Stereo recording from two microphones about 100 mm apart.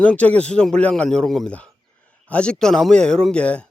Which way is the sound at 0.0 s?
10° left (ahead or behind).